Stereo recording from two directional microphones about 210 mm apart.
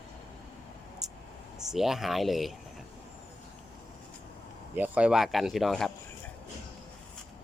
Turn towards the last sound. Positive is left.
turn(degrees=0)  # may be behind; listen again after turning